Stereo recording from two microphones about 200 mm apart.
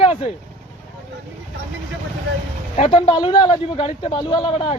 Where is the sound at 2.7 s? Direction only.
25° left (ahead or behind).